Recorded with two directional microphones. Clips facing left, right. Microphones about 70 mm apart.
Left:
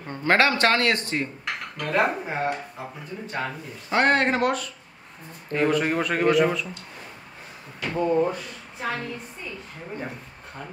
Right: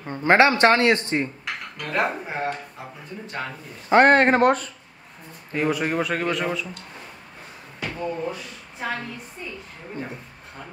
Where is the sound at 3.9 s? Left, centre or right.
Right.